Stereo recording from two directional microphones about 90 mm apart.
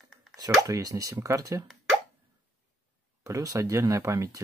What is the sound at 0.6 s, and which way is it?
Speech, 35° right (ahead or behind).